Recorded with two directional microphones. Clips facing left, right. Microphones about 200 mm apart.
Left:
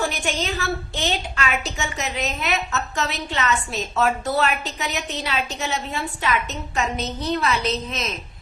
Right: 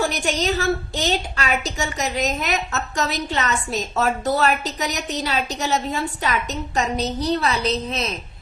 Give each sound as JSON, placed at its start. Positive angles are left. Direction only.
{"t": 0.0, "sound": "a woman's voice", "side_deg": -40}